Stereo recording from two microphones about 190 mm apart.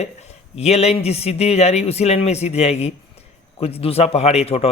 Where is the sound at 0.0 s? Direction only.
35° left (ahead or behind).